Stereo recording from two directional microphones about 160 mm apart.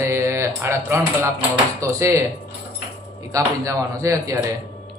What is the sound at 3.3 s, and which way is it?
Speech, 20° right (ahead or behind).